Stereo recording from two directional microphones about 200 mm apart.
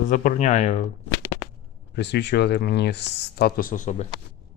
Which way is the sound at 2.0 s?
60° left (ahead or behind).